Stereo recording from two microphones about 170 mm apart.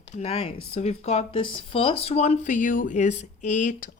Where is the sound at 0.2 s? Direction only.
35° left (ahead or behind).